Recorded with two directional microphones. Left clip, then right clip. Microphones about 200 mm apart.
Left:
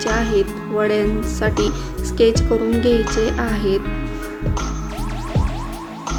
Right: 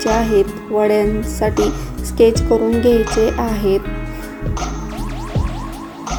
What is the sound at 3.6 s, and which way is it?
Speech, 30° left (ahead or behind).